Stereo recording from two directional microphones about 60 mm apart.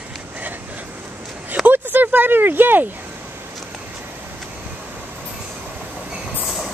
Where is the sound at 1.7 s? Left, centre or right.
Right.